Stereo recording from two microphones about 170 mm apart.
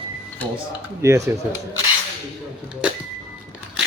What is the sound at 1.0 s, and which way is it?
Speech, 15° right (ahead or behind).